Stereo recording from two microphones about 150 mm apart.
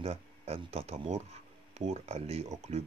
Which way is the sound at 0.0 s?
45° right (ahead or behind).